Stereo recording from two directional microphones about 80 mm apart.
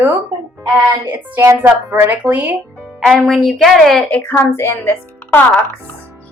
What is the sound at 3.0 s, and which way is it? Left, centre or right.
A woman's voice, centre.